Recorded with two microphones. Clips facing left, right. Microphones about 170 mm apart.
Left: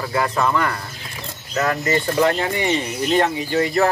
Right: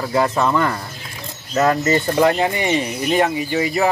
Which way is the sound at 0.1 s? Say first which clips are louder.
Right 3 dB; 25° right (ahead or behind).